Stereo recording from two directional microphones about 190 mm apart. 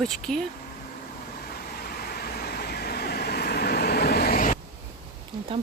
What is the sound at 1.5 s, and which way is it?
Vehicle, 50° left (ahead or behind).